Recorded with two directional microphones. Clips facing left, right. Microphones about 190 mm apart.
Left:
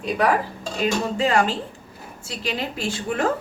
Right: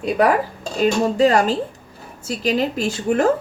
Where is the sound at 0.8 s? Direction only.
40° right (ahead or behind).